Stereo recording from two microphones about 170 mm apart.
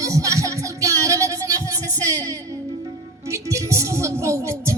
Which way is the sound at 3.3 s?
15° right (ahead or behind).